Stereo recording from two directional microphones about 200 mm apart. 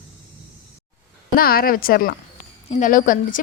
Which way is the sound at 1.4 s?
50° left (ahead or behind).